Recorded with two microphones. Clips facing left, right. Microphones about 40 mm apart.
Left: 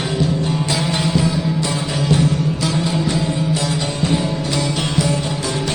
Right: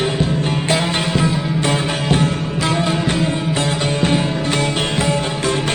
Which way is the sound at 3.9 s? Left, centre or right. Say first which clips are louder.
Right 2 dB; right.